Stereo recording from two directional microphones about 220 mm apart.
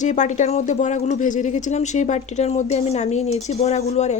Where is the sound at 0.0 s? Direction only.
35° left (ahead or behind).